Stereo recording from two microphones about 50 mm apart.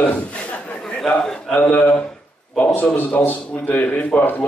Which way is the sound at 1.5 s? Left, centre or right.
Left.